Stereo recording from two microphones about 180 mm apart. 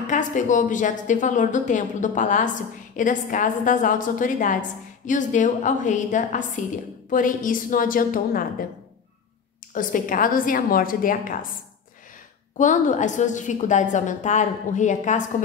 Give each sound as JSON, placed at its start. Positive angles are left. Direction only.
{"t": 0.0, "sound": "a woman's voice", "side_deg": 45}
{"t": 9.8, "sound": "a woman's voice", "side_deg": 50}
{"t": 12.5, "sound": "a woman's voice", "side_deg": 45}